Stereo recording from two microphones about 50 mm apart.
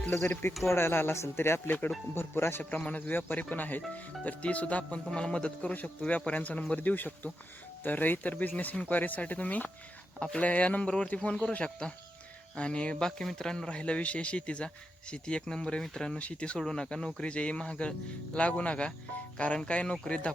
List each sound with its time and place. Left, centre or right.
0.1 s a man's voice: left
2.9 s a man's voice: left
13.1 s a man's voice: centre
16.1 s a man's voice: left
16.6 s a man's voice: centre